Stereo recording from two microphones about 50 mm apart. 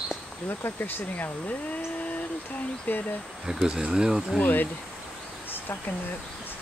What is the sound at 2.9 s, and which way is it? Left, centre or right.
Speech, left.